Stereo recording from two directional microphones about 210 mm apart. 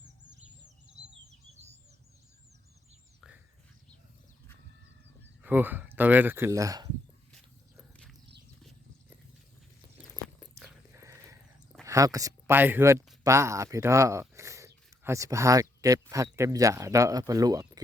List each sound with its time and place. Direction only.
1.5 s bird: 30° right (ahead or behind)
3.2 s dog: 5° right (ahead or behind)
5.4 s speech: 10° right (ahead or behind)
7.8 s a sound: 5° left (ahead or behind)
10.9 s horse: 15° right (ahead or behind)
11.8 s speech: 15° right (ahead or behind)